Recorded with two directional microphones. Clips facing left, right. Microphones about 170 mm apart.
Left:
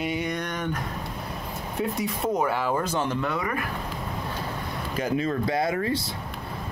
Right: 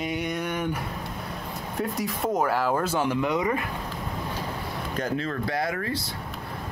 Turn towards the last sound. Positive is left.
turn(degrees=25)  # may be behind; listen again after turning